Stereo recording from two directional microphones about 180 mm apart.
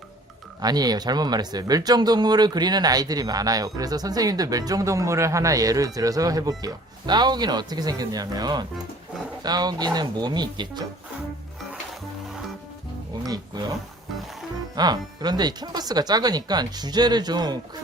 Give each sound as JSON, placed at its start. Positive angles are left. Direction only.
{"t": 0.6, "sound": "speech", "side_deg": -20}
{"t": 13.2, "sound": "speech", "side_deg": -20}
{"t": 14.8, "sound": "speech", "side_deg": -20}